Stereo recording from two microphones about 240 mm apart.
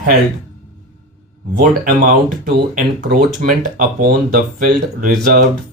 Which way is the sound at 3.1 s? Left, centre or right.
Right.